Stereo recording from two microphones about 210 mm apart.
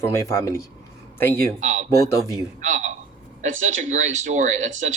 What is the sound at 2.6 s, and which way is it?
Speech, 35° right (ahead or behind).